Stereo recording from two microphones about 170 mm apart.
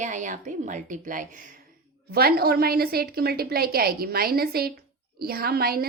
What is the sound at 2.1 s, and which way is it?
A woman's voice, 65° right (ahead or behind).